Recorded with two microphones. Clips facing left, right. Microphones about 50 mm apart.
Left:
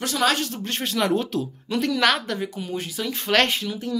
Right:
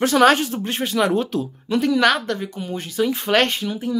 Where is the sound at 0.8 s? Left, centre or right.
Centre.